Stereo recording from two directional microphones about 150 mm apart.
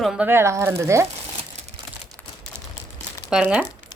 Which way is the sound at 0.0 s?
Centre (ahead or behind).